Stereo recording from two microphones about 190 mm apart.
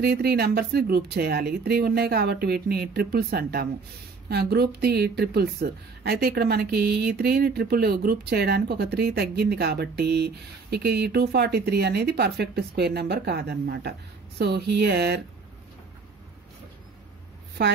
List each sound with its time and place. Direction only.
0.0 s a woman's voice: 55° right (ahead or behind)